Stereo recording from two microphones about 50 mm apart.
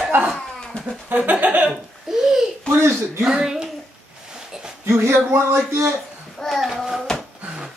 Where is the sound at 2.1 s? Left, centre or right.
Centre.